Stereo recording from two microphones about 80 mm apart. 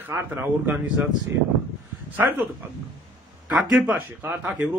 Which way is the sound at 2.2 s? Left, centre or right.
Right.